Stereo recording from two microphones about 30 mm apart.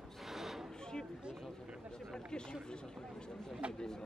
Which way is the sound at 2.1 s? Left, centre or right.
Left.